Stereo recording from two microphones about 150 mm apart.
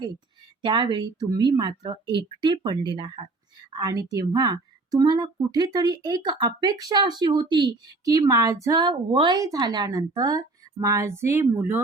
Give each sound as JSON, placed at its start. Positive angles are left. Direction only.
{"t": 0.6, "sound": "a woman's voice", "side_deg": -30}